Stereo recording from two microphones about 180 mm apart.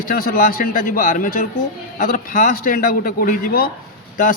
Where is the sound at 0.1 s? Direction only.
55° left (ahead or behind).